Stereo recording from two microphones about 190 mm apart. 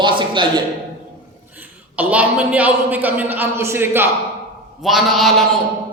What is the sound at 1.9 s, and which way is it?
A man's voice, 10° right (ahead or behind).